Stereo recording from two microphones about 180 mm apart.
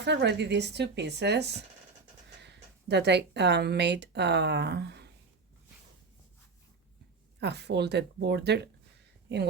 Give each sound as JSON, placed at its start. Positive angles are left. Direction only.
{"t": 0.0, "sound": "speech", "side_deg": -75}
{"t": 7.3, "sound": "speech", "side_deg": -70}